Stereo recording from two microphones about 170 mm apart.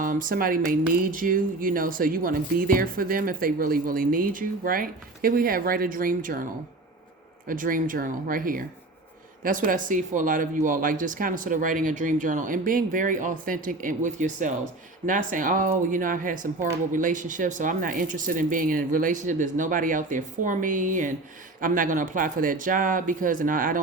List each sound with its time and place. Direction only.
0.0 s speech: 55° right (ahead or behind)
7.4 s speech: 55° right (ahead or behind)